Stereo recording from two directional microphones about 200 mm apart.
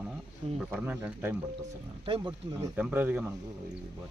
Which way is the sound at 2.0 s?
25° right (ahead or behind).